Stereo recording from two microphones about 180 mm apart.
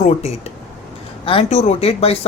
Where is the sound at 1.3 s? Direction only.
30° left (ahead or behind).